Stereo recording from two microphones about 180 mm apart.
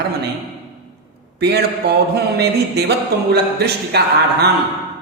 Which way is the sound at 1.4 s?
65° right (ahead or behind).